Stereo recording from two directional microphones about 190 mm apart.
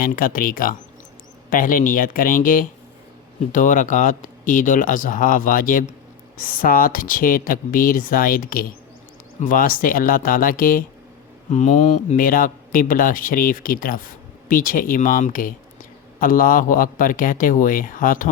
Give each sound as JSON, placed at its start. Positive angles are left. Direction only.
{"t": 0.0, "sound": "speech", "side_deg": 45}
{"t": 11.5, "sound": "speech", "side_deg": 35}